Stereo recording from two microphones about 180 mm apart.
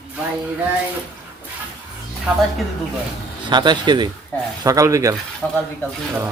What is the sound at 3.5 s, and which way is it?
Speech, 25° right (ahead or behind).